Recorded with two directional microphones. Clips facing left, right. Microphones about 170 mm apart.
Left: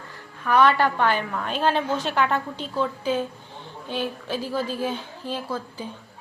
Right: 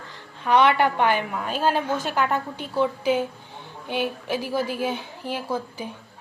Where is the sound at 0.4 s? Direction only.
20° right (ahead or behind).